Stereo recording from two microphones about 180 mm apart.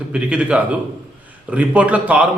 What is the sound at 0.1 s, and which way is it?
A man's voice, 5° right (ahead or behind).